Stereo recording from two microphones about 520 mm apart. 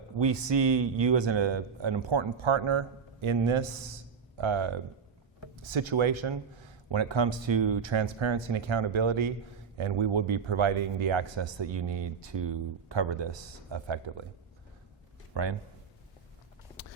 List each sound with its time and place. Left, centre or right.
0.2 s speech: right
5.7 s speech: right
15.3 s speech: right